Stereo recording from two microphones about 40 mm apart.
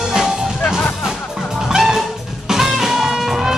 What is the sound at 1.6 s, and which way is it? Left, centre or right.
Music, centre.